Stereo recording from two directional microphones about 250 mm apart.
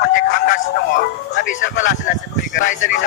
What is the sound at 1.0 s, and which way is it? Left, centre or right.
Speech, left.